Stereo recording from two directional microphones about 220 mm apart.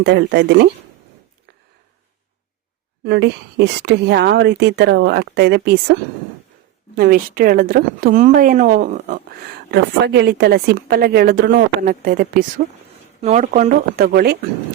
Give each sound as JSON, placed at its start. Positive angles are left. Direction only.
{"t": 0.0, "sound": "a woman's voice", "side_deg": -50}
{"t": 3.0, "sound": "a woman's voice", "side_deg": -50}
{"t": 9.7, "sound": "a woman's voice", "side_deg": -50}